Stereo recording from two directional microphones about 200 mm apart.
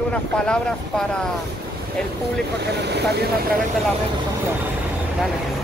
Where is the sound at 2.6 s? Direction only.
55° right (ahead or behind).